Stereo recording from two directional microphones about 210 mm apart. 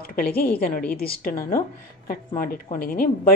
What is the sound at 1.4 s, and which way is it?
Speech, 15° left (ahead or behind).